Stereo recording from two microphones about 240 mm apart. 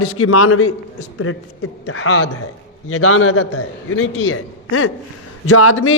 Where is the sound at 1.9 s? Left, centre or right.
Left.